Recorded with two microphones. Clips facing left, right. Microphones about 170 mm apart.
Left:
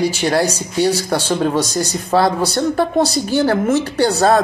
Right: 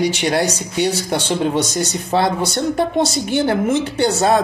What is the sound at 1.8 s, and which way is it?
Speech, 25° right (ahead or behind).